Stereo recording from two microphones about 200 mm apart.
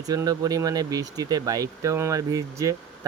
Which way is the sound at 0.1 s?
20° right (ahead or behind).